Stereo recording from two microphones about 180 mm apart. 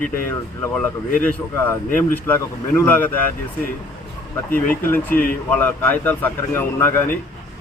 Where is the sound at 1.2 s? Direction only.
10° left (ahead or behind).